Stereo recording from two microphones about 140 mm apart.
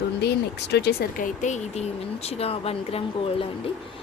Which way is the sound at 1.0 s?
70° left (ahead or behind).